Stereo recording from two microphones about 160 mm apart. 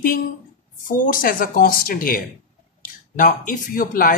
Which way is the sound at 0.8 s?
55° left (ahead or behind).